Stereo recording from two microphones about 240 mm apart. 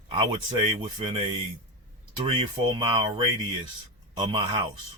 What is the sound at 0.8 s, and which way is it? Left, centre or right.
Speech, right.